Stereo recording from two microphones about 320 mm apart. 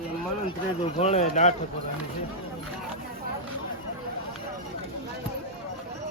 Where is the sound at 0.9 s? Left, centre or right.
Left.